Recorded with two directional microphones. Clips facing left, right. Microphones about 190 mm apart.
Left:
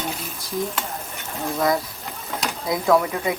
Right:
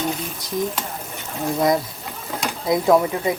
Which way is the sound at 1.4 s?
20° right (ahead or behind).